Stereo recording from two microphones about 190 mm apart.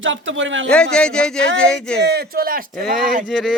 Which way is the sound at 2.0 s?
55° right (ahead or behind).